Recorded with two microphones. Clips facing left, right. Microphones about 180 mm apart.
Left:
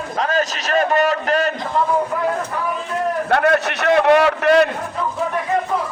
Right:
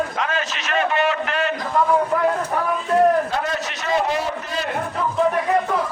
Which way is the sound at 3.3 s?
65° left (ahead or behind).